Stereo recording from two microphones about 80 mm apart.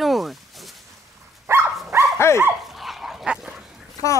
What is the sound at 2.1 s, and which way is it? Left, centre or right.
Dog, left.